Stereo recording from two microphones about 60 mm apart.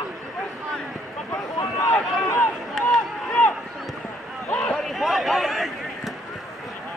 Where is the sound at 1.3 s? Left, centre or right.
Left.